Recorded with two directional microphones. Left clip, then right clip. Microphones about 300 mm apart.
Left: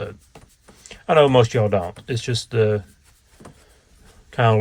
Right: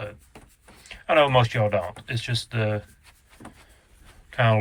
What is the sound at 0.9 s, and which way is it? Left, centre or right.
Speech, centre.